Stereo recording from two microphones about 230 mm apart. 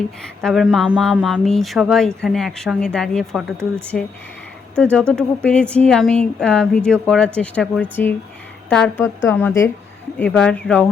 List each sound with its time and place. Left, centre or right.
0.4 s a woman's voice: centre